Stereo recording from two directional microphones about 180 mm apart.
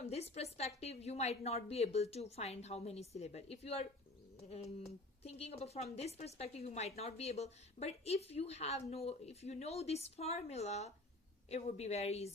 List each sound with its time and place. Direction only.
0.0 s speech: 35° left (ahead or behind)